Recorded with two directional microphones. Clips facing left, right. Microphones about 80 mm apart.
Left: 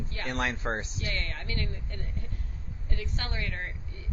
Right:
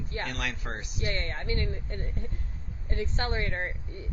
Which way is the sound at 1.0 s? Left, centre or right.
Right.